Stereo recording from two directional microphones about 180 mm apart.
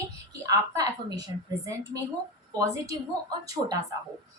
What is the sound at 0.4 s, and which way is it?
A woman's voice, 20° right (ahead or behind).